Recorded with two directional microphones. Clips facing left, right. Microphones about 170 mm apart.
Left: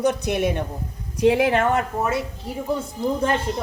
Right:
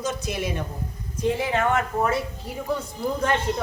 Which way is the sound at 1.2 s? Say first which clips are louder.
Left 6 dB; 75° left (ahead or behind).